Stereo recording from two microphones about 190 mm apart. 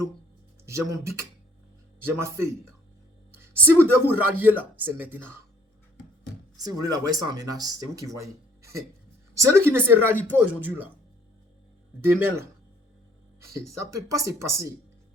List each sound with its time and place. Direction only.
0.6 s speech: 15° right (ahead or behind)
3.8 s speech: 10° right (ahead or behind)
6.6 s speech: 20° right (ahead or behind)
9.3 s speech: 15° right (ahead or behind)
12.0 s speech: 10° right (ahead or behind)
13.5 s speech: 15° right (ahead or behind)